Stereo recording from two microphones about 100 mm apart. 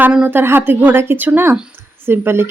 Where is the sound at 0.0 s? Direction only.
15° right (ahead or behind).